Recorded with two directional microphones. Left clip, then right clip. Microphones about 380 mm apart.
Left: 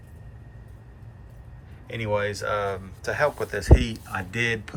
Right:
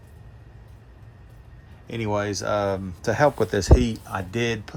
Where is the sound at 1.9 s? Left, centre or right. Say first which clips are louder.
Even; centre.